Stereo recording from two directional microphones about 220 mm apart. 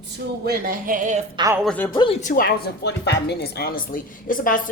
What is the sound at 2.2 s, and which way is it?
Speech, 40° left (ahead or behind).